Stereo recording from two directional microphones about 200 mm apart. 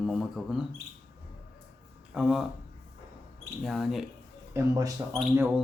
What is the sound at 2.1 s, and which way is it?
Speech, 5° right (ahead or behind).